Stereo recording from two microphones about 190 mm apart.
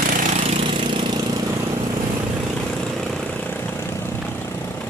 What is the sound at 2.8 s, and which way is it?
Vehicle, 5° left (ahead or behind).